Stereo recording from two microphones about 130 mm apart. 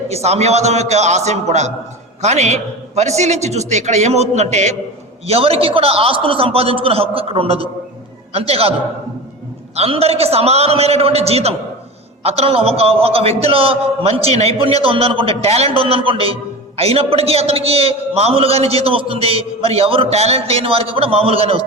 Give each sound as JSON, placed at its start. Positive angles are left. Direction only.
{"t": 0.1, "sound": "a man's voice", "side_deg": -55}
{"t": 9.7, "sound": "a man's voice", "side_deg": -50}